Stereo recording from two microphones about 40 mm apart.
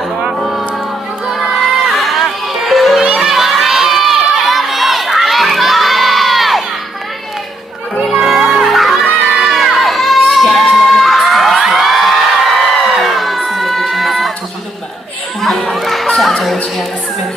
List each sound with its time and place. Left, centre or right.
0.3 s music: centre
3.2 s crowd: centre
8.1 s music: centre
9.3 s children shouting: centre
15.7 s a sound: centre